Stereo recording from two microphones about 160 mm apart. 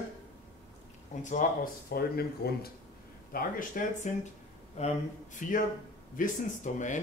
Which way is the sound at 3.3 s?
60° left (ahead or behind).